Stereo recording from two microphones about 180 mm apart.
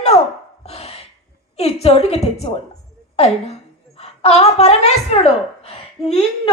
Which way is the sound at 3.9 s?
35° left (ahead or behind).